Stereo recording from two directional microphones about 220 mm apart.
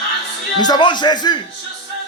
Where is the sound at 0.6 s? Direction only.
20° left (ahead or behind).